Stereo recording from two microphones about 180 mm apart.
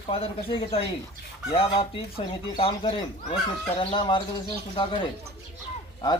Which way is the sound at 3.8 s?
25° left (ahead or behind).